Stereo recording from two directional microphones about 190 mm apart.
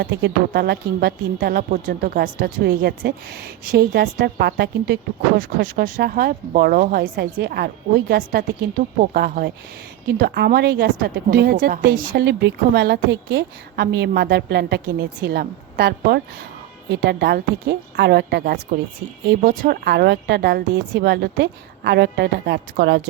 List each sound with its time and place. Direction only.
0.0 s a woman's voice: 60° right (ahead or behind)
7.0 s a woman's voice: 65° right (ahead or behind)
19.4 s a woman's voice: 50° right (ahead or behind)